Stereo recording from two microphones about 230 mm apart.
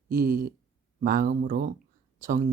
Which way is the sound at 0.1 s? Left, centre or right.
Right.